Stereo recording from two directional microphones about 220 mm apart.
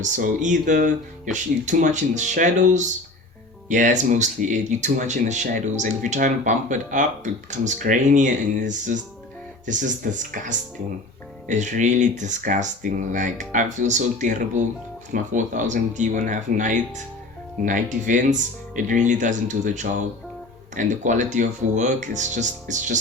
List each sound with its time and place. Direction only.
0.0 s speech: 35° right (ahead or behind)
11.4 s speech: 35° right (ahead or behind)